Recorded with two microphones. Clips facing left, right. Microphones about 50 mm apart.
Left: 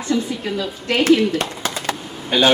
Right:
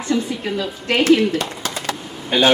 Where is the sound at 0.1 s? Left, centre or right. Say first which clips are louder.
Even; right.